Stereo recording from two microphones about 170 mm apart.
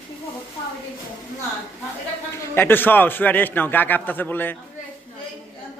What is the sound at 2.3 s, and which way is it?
A man's voice, 15° left (ahead or behind).